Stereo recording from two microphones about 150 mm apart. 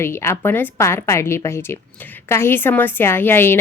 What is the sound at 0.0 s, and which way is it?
A woman's voice, 15° left (ahead or behind).